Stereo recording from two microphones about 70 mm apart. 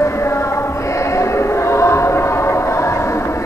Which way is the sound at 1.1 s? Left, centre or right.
Left.